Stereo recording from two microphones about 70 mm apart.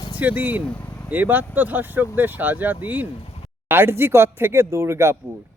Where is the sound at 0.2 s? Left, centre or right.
Right.